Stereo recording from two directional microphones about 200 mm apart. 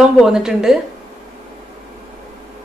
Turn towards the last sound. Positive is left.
turn(degrees=0)  # may be behind; listen again after turning